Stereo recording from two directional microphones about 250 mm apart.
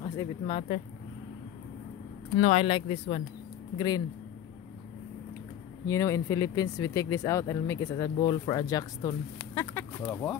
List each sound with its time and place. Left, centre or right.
0.0 s speech: centre
2.3 s speech: left
5.9 s speech: centre
9.4 s a sound: centre